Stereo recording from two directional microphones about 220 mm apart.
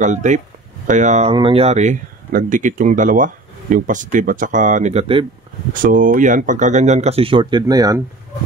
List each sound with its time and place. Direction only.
0.0 s speech: 35° right (ahead or behind)
5.7 s speech: 40° right (ahead or behind); by 8.0 s 15° right (ahead or behind)